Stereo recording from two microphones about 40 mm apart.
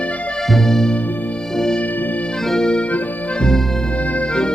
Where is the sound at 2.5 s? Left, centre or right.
Centre.